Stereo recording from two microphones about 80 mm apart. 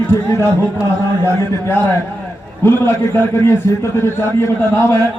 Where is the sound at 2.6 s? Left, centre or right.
Left.